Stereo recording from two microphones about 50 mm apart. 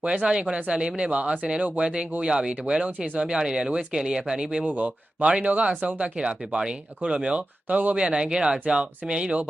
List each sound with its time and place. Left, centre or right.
0.0 s speech: right
2.2 s speech: centre
4.6 s speech: right
7.9 s speech: centre